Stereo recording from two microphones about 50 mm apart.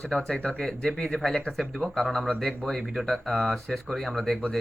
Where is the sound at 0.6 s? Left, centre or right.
Centre.